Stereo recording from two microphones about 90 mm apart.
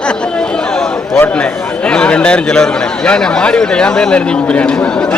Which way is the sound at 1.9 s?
10° left (ahead or behind).